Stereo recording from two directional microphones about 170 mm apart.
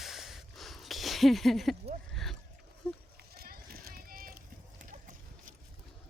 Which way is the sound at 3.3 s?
65° right (ahead or behind).